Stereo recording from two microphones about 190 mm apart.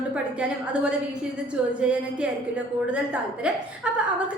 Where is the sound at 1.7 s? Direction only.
5° right (ahead or behind).